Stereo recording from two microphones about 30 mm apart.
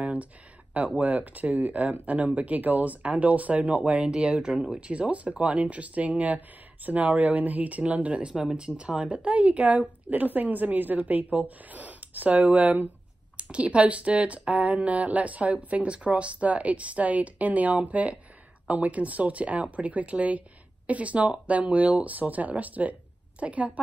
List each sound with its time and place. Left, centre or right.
0.0 s a sound: right
0.7 s a woman's voice: right
4.0 s speech: right
4.7 s a woman's voice: right
9.1 s a woman's voice: right
13.4 s a woman's voice: right